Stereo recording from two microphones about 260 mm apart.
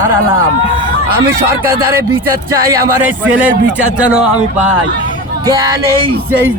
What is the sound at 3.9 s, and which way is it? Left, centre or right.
Speech, centre.